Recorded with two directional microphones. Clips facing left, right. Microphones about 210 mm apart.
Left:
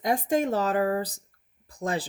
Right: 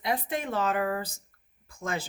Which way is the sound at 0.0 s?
45° left (ahead or behind).